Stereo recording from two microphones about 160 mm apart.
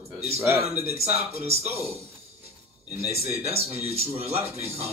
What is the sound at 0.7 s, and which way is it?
A man's voice, 40° right (ahead or behind).